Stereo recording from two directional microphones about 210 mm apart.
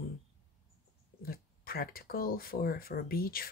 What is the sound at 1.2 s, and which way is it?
Speech, 45° left (ahead or behind).